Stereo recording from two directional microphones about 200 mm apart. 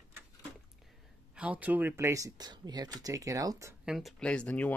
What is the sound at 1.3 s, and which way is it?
Speech, 5° right (ahead or behind).